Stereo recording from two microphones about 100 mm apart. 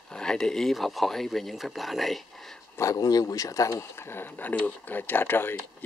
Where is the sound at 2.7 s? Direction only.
30° left (ahead or behind).